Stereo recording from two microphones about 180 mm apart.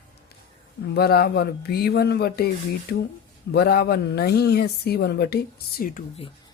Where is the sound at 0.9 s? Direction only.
60° left (ahead or behind).